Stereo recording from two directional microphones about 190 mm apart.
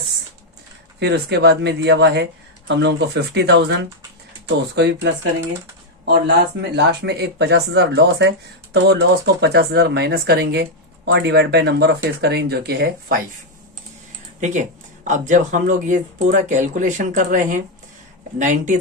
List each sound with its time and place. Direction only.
0.9 s speech: 60° right (ahead or behind)
14.4 s speech: 40° right (ahead or behind)